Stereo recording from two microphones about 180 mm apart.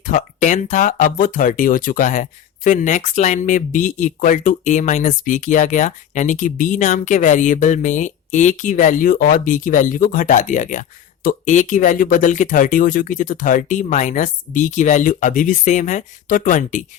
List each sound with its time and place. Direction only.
0.0 s speech: 45° left (ahead or behind)